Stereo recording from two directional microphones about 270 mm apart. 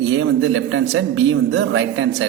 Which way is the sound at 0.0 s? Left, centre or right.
Right.